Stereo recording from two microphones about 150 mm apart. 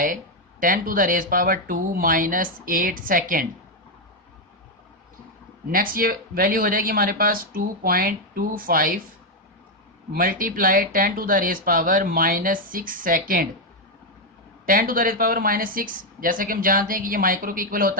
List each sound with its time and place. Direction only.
0.6 s speech: 65° right (ahead or behind)
5.7 s speech: 70° right (ahead or behind)
10.1 s speech: 70° right (ahead or behind)
14.7 s speech: 70° right (ahead or behind)